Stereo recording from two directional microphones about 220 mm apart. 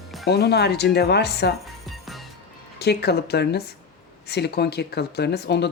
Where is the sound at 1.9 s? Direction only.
Centre (ahead or behind).